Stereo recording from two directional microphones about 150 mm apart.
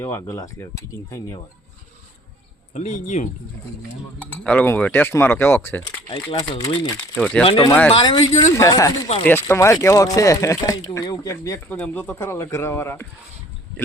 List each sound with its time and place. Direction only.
0.0 s speech: 15° left (ahead or behind)
2.7 s speech: 50° left (ahead or behind)
4.2 s speech: 10° left (ahead or behind)
7.2 s speech: 5° left (ahead or behind)
7.4 s speech: 35° left (ahead or behind)
7.7 s speech: 10° left (ahead or behind)
7.9 s speech: 35° left (ahead or behind)
8.5 s speech: 20° left (ahead or behind)
11.8 s speech: 10° left (ahead or behind)